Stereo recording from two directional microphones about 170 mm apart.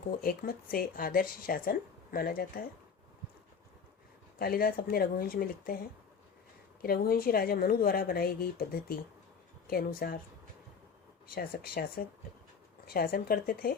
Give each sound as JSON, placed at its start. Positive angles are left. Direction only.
{"t": 0.2, "sound": "speech", "side_deg": 60}
{"t": 4.4, "sound": "speech", "side_deg": 60}
{"t": 6.8, "sound": "speech", "side_deg": 60}
{"t": 11.3, "sound": "speech", "side_deg": 60}